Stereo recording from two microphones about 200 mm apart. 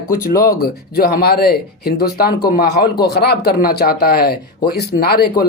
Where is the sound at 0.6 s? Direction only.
50° left (ahead or behind).